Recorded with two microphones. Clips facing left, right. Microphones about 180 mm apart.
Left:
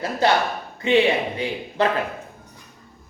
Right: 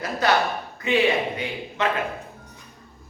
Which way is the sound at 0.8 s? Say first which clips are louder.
Left 3 dB; 30° left (ahead or behind).